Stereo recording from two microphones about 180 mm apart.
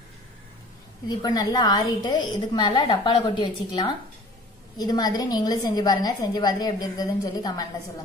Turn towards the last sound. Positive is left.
turn(degrees=20)  # may be behind; listen again after turning